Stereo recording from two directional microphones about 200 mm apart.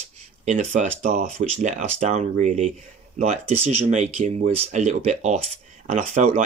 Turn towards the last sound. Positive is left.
turn(degrees=-35)  # may be behind; listen again after turning